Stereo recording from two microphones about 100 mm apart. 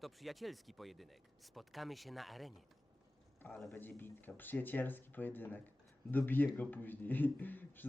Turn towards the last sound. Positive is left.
turn(degrees=20)  # may be behind; listen again after turning